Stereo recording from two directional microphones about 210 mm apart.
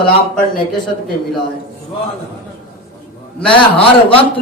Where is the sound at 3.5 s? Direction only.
25° left (ahead or behind).